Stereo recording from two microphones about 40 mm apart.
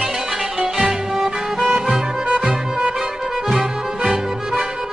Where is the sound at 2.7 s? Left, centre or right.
Centre.